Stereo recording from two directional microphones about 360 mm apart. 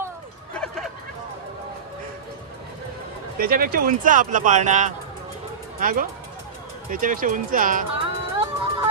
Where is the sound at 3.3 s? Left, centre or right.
Right.